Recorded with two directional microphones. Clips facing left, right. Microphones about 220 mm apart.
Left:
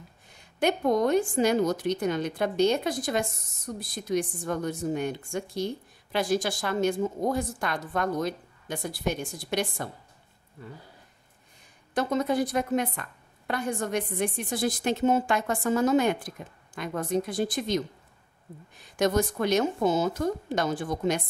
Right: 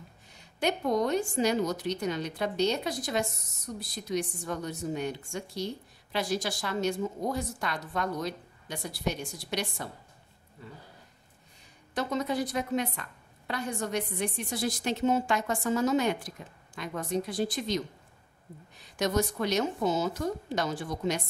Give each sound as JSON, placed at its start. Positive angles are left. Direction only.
{"t": 0.3, "sound": "a woman's voice", "side_deg": 50}
{"t": 11.9, "sound": "a woman's voice", "side_deg": 50}
{"t": 18.9, "sound": "a woman's voice", "side_deg": 50}